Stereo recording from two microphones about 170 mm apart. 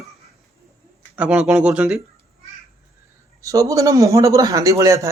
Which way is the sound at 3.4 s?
20° right (ahead or behind).